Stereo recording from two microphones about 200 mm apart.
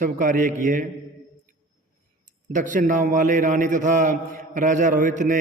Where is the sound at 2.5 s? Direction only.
40° right (ahead or behind).